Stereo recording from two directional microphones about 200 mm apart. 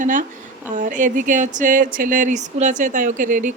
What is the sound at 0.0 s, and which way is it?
Speech, 40° right (ahead or behind).